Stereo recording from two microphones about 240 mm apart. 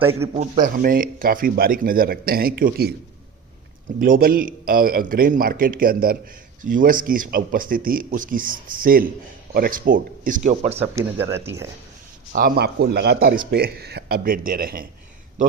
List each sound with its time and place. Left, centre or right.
0.3 s speech: right
4.0 s speech: right
10.8 s speech: centre
12.3 s speech: right